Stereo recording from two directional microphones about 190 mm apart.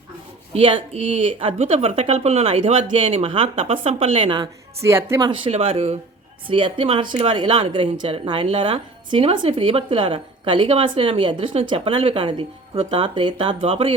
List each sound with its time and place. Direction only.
0.5 s a woman's voice: 30° right (ahead or behind)
4.8 s speech: 15° right (ahead or behind)
5.3 s a woman's voice: 30° right (ahead or behind)